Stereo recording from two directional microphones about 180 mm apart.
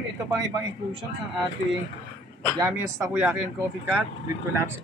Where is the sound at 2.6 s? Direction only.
15° right (ahead or behind).